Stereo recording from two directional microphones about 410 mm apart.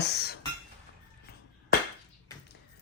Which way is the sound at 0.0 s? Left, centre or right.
Left.